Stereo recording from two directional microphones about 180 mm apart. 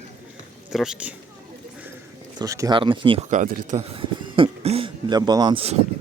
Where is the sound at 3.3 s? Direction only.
50° right (ahead or behind).